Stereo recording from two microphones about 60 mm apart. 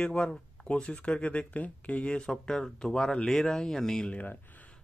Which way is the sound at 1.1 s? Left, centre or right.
Left.